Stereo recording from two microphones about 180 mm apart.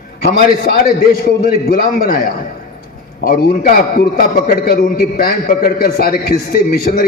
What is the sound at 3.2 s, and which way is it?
A man's voice, 55° left (ahead or behind).